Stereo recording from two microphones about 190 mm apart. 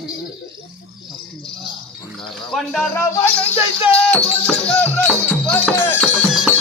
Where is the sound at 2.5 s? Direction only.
Centre (ahead or behind).